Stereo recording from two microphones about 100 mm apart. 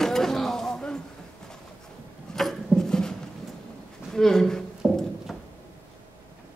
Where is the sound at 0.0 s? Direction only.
5° left (ahead or behind).